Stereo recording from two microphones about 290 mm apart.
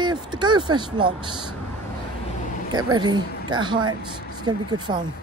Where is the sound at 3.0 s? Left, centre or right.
Centre.